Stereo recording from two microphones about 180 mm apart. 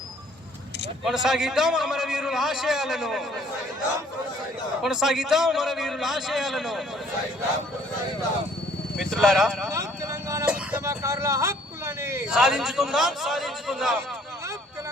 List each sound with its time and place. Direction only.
1.0 s a man's voice: centre (ahead or behind)
4.8 s a man's voice: 5° right (ahead or behind)
9.0 s a man's voice: centre (ahead or behind)
9.6 s vehicle: 20° right (ahead or behind)
10.4 s a sound: 10° right (ahead or behind)
12.3 s a man's voice: centre (ahead or behind)